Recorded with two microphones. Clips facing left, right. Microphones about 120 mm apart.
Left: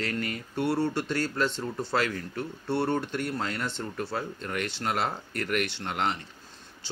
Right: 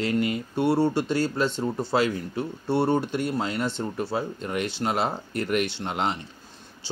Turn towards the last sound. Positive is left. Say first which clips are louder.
# right 2 dB
turn(degrees=-20)  # may be behind; listen again after turning